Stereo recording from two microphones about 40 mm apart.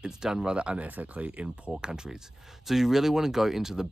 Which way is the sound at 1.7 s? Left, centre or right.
Centre.